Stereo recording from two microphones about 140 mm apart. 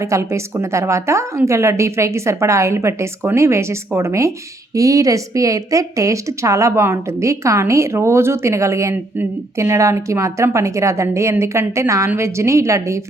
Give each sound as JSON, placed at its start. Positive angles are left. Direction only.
{"t": 0.0, "sound": "a woman's voice", "side_deg": -20}